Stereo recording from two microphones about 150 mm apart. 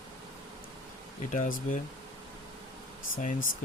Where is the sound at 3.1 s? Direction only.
60° left (ahead or behind).